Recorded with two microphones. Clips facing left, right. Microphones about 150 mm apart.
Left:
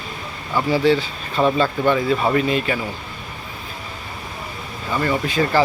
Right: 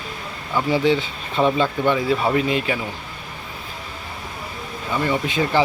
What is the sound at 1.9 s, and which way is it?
Speech, 5° right (ahead or behind).